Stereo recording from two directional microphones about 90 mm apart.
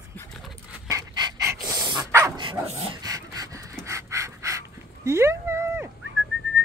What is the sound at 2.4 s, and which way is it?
Dog, 70° right (ahead or behind).